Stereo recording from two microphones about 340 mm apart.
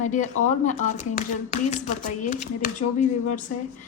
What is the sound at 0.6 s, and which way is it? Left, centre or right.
A woman's voice, left.